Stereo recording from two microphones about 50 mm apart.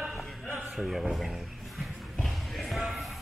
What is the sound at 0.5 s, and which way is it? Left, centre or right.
Speech, centre.